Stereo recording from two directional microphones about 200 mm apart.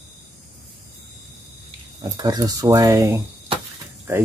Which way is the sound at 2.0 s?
20° right (ahead or behind).